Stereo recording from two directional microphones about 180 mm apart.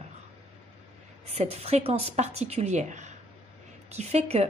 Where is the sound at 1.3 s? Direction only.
35° right (ahead or behind).